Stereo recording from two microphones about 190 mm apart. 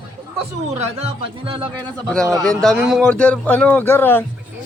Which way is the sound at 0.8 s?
35° right (ahead or behind).